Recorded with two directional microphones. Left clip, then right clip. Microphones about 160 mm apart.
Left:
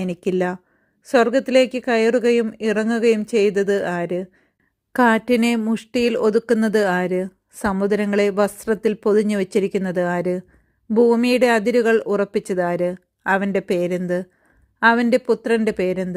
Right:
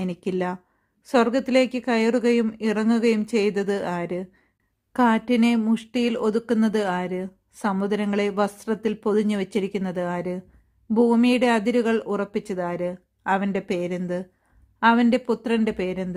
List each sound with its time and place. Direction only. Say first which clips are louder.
0.0 s speech: left 5 dB; 25° left (ahead or behind)
4.9 s speech: left 5 dB; 30° left (ahead or behind)